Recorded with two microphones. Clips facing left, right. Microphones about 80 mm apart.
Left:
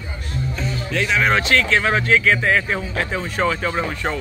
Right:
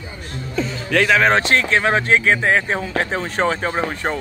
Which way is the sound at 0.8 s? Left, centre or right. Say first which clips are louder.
Right 7 dB; right.